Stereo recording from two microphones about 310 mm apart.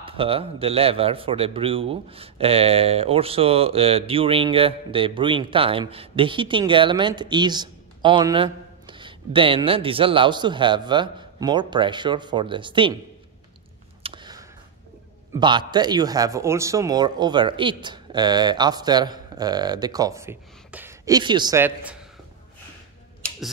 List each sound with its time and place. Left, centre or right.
0.0 s a man's voice: centre
14.0 s a sound: centre
15.3 s a man's voice: centre